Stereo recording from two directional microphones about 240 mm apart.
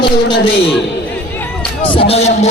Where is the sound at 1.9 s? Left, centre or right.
Left.